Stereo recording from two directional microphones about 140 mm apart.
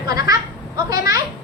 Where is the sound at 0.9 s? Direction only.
25° right (ahead or behind).